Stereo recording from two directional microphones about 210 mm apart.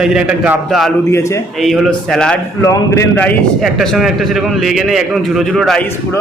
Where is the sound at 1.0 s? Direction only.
15° left (ahead or behind).